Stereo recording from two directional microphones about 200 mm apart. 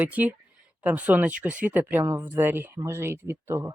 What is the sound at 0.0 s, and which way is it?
Speech, 10° right (ahead or behind).